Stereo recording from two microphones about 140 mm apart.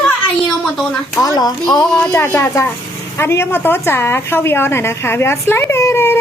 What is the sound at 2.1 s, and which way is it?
A woman's voice, 15° left (ahead or behind).